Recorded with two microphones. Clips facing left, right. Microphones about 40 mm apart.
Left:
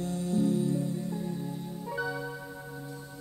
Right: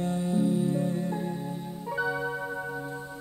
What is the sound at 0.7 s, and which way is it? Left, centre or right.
Music, right.